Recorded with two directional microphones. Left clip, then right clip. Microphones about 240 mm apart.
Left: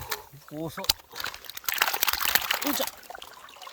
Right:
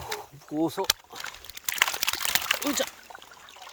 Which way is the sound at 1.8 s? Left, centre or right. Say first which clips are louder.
Even; left.